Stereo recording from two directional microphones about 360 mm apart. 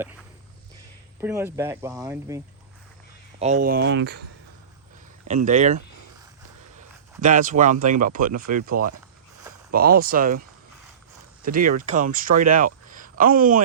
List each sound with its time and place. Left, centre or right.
1.2 s speech: centre
3.3 s speech: centre
5.3 s speech: centre
7.2 s speech: right
11.4 s speech: right